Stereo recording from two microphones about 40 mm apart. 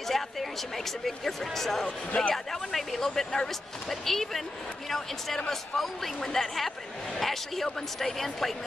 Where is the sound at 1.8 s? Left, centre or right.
Left.